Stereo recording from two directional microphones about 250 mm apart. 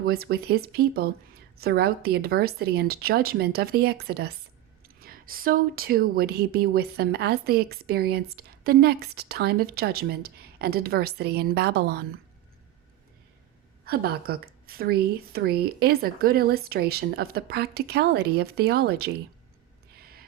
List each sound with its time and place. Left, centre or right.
0.0 s speech: right
13.8 s speech: right
20.0 s a sound: right